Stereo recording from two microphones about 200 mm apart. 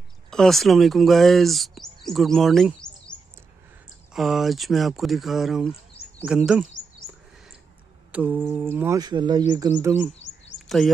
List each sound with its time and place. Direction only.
0.3 s speech: centre (ahead or behind)
8.1 s mantra: 10° right (ahead or behind)
8.6 s speech: 10° right (ahead or behind)
9.8 s mantra: 10° right (ahead or behind)
10.5 s chirp: 65° left (ahead or behind)